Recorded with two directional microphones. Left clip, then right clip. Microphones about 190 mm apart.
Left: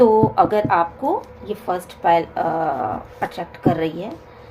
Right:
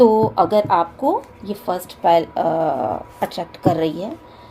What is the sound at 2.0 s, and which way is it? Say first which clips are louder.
A woman's voice: right 2 dB; 50° right (ahead or behind).